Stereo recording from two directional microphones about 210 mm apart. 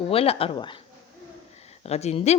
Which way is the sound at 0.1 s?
25° left (ahead or behind).